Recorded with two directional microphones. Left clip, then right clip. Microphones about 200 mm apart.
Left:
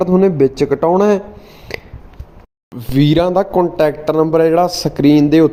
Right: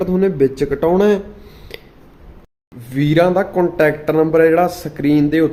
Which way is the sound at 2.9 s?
30° left (ahead or behind).